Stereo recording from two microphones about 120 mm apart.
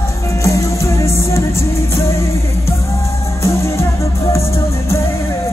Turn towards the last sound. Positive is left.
turn(degrees=25)  # may be behind; listen again after turning